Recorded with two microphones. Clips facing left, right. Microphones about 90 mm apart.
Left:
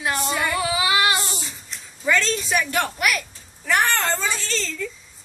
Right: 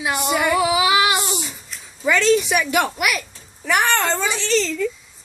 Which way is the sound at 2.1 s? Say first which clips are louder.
Right 5 dB; 10° right (ahead or behind).